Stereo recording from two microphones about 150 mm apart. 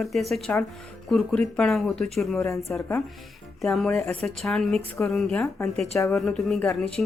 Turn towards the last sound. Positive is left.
turn(degrees=5)  # may be behind; listen again after turning